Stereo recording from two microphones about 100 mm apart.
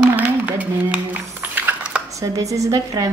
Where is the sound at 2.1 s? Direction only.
35° right (ahead or behind).